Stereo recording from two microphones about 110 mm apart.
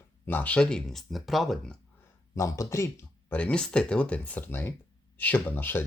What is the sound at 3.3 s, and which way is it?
Speech, 10° left (ahead or behind).